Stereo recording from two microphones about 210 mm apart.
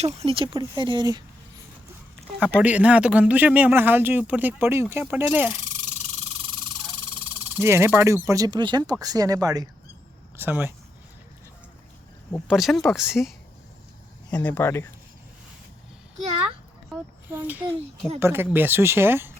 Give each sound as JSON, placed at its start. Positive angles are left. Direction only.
{"t": 0.0, "sound": "speech", "side_deg": -30}
{"t": 2.4, "sound": "speech", "side_deg": -5}
{"t": 5.6, "sound": "a sound", "side_deg": -35}
{"t": 7.5, "sound": "speech", "side_deg": -10}
{"t": 12.5, "sound": "speech", "side_deg": 0}
{"t": 14.3, "sound": "speech", "side_deg": 15}
{"t": 17.2, "sound": "speech", "side_deg": -10}